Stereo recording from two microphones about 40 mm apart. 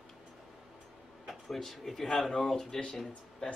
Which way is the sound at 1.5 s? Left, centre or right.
Centre.